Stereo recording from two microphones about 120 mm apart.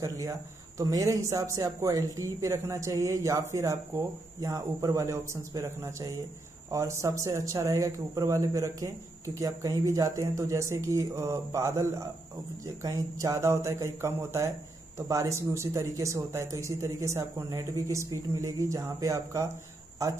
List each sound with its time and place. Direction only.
0.0 s speech: 25° right (ahead or behind)